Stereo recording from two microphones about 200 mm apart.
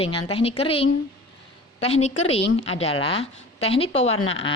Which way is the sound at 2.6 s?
30° left (ahead or behind).